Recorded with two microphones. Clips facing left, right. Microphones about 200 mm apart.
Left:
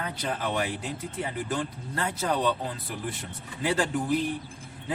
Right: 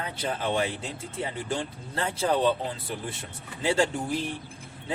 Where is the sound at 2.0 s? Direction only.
30° right (ahead or behind).